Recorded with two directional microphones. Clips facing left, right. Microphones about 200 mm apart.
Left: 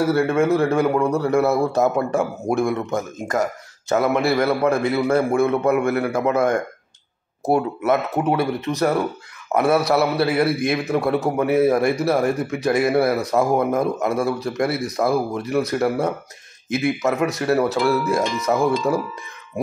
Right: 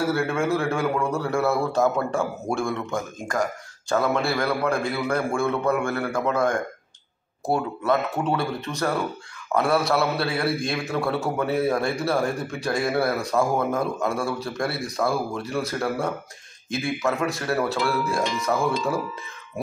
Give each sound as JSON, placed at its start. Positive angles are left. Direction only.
{"t": 0.3, "sound": "speech", "side_deg": 20}
{"t": 16.8, "sound": "speech", "side_deg": 20}